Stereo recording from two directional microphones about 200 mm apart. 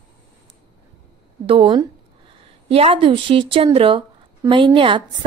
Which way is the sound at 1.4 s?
25° right (ahead or behind).